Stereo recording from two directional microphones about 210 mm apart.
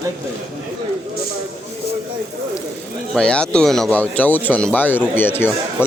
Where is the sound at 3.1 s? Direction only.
5° left (ahead or behind).